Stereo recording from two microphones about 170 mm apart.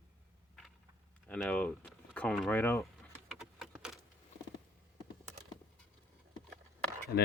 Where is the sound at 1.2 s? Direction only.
5° left (ahead or behind).